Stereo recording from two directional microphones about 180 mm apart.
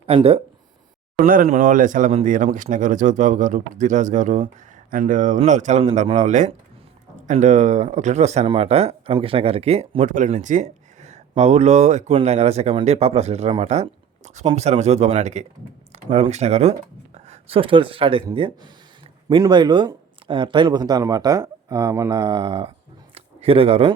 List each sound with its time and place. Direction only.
0.0 s speech: 35° right (ahead or behind)
1.2 s speech: 45° right (ahead or behind); by 22.7 s 30° right (ahead or behind)
23.1 s a sound: 30° right (ahead or behind)